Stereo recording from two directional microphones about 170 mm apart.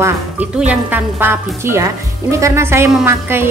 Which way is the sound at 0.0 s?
10° right (ahead or behind).